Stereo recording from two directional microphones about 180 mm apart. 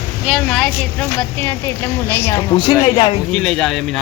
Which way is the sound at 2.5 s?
30° left (ahead or behind).